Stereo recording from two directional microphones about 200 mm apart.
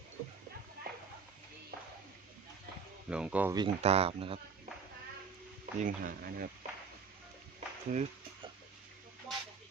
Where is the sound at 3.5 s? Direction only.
30° right (ahead or behind).